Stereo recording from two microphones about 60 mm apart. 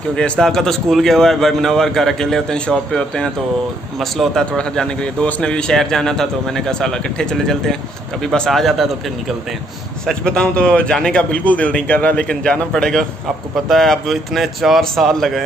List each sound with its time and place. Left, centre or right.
0.1 s a man's voice: centre
4.0 s a man's voice: centre
4.6 s a man's voice: centre
10.0 s a man's voice: centre
11.3 s a man's voice: left; by 15.4 s centre